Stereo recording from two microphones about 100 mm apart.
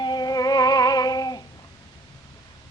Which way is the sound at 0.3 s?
40° left (ahead or behind).